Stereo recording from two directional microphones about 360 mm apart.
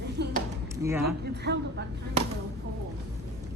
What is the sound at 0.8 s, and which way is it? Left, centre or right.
Speech, centre.